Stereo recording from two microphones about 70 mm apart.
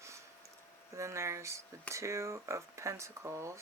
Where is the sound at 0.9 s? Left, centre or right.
Right.